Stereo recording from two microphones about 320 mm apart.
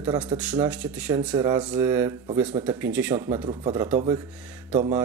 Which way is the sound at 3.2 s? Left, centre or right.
Centre.